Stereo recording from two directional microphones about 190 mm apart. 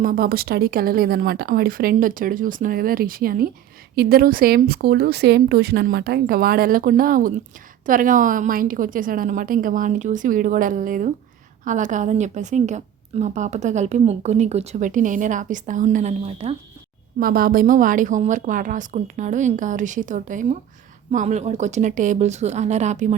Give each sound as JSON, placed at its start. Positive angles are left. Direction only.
{"t": 0.0, "sound": "a woman's voice", "side_deg": -50}
{"t": 17.2, "sound": "a woman's voice", "side_deg": -50}